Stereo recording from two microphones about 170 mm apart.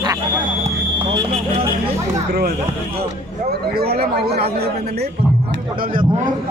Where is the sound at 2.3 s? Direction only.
65° right (ahead or behind).